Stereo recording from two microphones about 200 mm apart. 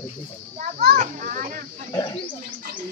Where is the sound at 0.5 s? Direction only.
40° right (ahead or behind).